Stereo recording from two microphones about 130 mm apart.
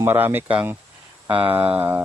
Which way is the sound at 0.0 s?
20° right (ahead or behind).